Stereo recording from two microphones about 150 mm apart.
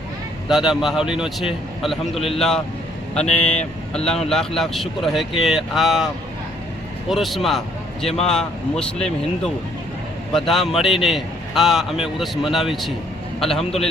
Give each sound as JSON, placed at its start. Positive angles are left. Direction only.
{"t": 0.4, "sound": "speech", "side_deg": -5}
{"t": 7.1, "sound": "speech", "side_deg": 0}